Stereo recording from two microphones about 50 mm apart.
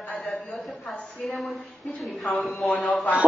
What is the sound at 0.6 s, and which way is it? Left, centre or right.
A woman's voice, centre.